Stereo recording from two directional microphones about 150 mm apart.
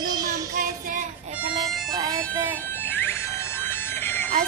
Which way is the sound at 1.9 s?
25° right (ahead or behind).